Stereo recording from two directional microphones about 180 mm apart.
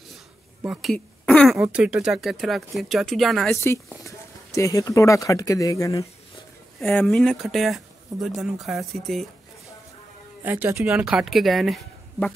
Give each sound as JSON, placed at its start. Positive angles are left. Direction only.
{"t": 0.6, "sound": "speech", "side_deg": -5}
{"t": 0.9, "sound": "speech", "side_deg": 5}
{"t": 3.6, "sound": "speech", "side_deg": 15}
{"t": 6.8, "sound": "speech", "side_deg": 5}
{"t": 10.4, "sound": "speech", "side_deg": -10}